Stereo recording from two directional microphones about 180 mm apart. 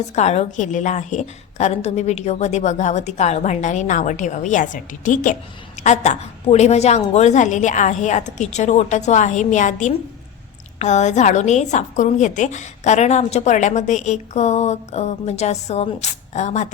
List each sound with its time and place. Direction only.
0.2 s a woman's voice: 40° left (ahead or behind)